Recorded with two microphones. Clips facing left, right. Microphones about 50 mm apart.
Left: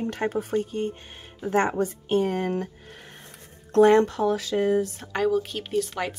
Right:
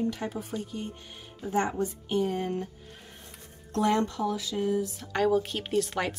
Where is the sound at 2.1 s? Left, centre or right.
Left.